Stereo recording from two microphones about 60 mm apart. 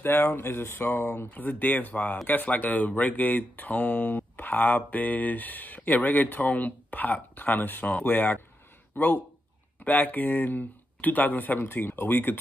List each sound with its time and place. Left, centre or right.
0.0 s speech: left